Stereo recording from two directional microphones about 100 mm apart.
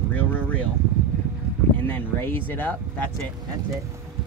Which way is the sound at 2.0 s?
20° left (ahead or behind).